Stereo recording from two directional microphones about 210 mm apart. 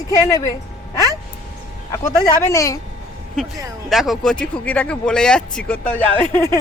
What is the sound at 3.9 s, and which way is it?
Speech, centre (ahead or behind).